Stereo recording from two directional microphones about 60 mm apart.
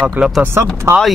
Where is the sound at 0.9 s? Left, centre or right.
Right.